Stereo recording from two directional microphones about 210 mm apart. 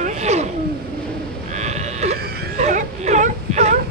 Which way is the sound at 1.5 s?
35° right (ahead or behind).